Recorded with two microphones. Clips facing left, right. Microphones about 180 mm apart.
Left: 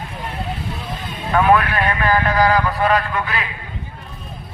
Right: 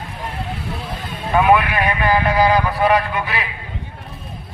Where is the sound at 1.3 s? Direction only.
15° right (ahead or behind).